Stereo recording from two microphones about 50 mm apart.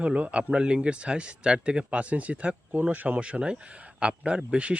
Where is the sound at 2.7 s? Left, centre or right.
Right.